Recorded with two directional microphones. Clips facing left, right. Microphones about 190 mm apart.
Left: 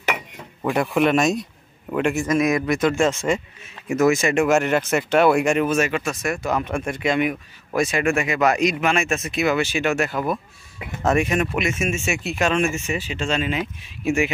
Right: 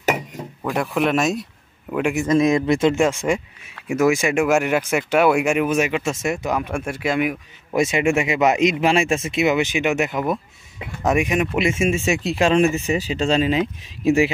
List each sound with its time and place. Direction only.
0.6 s a man's voice: centre (ahead or behind)
2.1 s speech: 25° right (ahead or behind)
3.0 s speech: 15° right (ahead or behind)
6.5 s speech: 10° right (ahead or behind)
7.7 s speech: 25° right (ahead or behind)
11.5 s speech: 25° right (ahead or behind)